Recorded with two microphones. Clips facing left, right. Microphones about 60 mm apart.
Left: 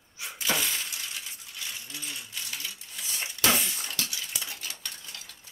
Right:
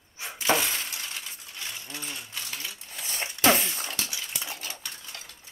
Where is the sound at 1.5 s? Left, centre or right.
Right.